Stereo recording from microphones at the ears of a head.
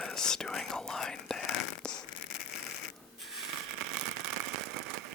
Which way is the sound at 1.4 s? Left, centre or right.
Left.